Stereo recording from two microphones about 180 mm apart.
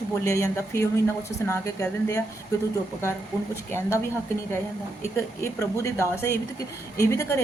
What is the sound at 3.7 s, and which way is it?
Speech, 15° left (ahead or behind).